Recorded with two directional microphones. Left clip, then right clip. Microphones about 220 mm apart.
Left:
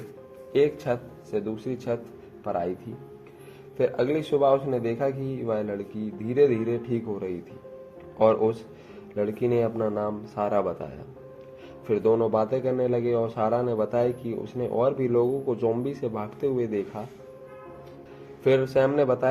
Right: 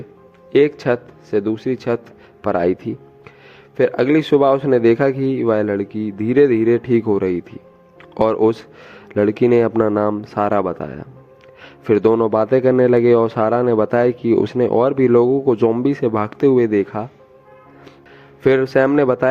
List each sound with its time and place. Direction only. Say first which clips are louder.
0.5 s a man's voice: right 9 dB; 45° right (ahead or behind)
18.4 s a man's voice: right 7 dB; 45° right (ahead or behind)